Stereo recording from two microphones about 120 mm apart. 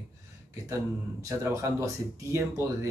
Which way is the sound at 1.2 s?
25° right (ahead or behind).